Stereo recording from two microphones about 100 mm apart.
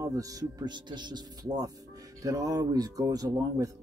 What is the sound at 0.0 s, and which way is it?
Speech, 35° right (ahead or behind).